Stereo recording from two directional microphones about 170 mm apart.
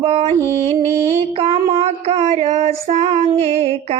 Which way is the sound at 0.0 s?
40° right (ahead or behind).